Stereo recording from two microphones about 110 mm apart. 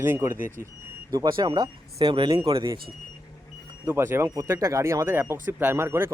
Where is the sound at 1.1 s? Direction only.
40° right (ahead or behind).